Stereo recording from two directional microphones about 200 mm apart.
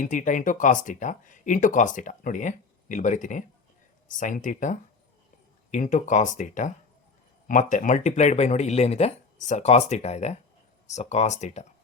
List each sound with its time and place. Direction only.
0.0 s speech: 40° left (ahead or behind)